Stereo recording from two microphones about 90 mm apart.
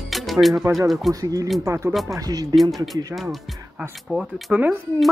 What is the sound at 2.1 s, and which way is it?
Speech, 40° right (ahead or behind).